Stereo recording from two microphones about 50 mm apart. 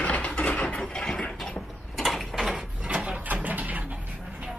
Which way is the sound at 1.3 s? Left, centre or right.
Centre.